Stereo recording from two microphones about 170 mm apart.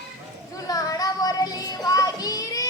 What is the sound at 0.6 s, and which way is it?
Child singing, 20° left (ahead or behind).